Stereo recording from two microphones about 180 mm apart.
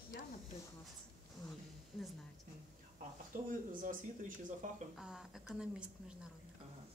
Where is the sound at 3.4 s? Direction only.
45° right (ahead or behind).